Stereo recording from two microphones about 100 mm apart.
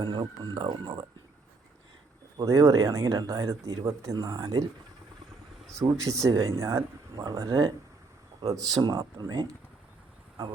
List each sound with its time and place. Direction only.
0.0 s speech: 50° right (ahead or behind)
2.4 s speech: 30° right (ahead or behind)
5.7 s speech: 30° right (ahead or behind)
8.7 s speech: 40° right (ahead or behind)